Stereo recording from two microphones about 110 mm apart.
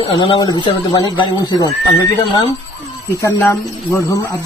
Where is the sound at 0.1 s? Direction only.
50° left (ahead or behind).